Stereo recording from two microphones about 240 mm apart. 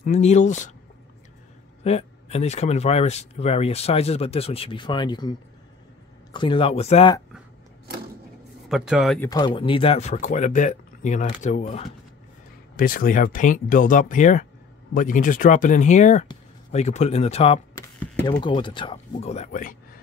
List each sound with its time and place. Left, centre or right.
0.0 s speech: left
1.8 s speech: left
6.3 s speech: centre
8.6 s speech: centre
9.3 s speech: centre